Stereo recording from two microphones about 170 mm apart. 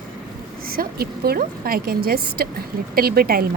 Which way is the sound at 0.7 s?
60° right (ahead or behind).